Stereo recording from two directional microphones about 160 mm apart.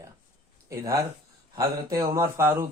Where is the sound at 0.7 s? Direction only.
20° right (ahead or behind).